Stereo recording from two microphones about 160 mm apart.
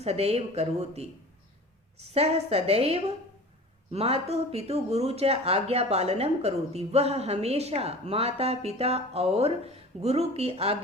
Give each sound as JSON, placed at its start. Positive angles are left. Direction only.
{"t": 0.0, "sound": "speech", "side_deg": -40}